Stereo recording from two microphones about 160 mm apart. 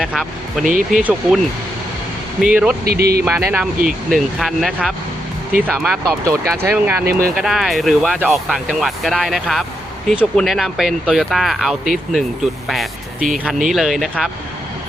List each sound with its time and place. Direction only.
0.0 s speech: centre (ahead or behind)
0.6 s speech: 55° right (ahead or behind)
2.4 s speech: 5° right (ahead or behind)
2.8 s speech: 75° right (ahead or behind)
3.2 s speech: 10° right (ahead or behind)
7.1 s speech: 65° right (ahead or behind)
7.3 s speech: centre (ahead or behind)
12.6 s vehicle: centre (ahead or behind)
13.4 s speech: centre (ahead or behind)